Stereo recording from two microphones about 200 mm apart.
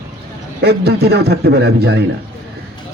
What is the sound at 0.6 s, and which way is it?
A man's voice, 55° right (ahead or behind).